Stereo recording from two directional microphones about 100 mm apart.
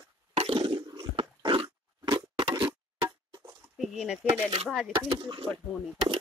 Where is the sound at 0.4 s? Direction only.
65° right (ahead or behind).